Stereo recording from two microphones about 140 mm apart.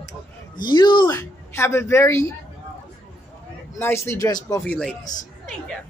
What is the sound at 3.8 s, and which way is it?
Speech, 20° left (ahead or behind).